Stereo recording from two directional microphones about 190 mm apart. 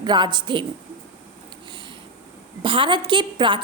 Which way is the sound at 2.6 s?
25° right (ahead or behind).